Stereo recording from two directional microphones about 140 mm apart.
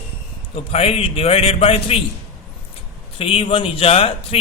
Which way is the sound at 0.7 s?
45° left (ahead or behind).